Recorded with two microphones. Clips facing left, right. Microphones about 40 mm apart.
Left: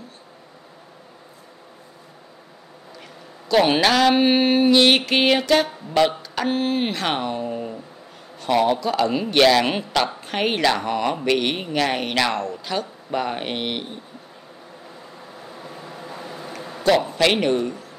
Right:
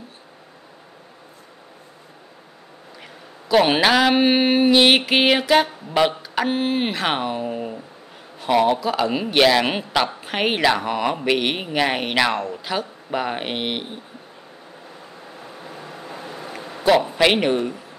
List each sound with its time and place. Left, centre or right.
3.4 s a man's voice: centre
15.4 s vehicle: centre
16.6 s a man's voice: centre